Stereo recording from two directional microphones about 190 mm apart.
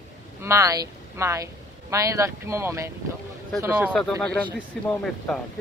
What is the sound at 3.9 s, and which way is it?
A man's voice, 5° left (ahead or behind).